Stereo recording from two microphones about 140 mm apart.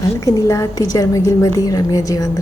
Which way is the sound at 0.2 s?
25° left (ahead or behind).